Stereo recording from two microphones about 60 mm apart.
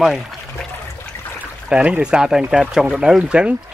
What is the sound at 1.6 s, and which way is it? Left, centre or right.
Speech, centre.